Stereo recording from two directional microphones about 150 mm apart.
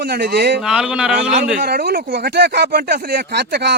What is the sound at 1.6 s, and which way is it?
Speech, 90° right.